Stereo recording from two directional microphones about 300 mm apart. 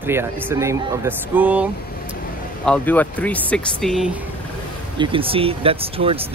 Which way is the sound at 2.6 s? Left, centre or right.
Centre.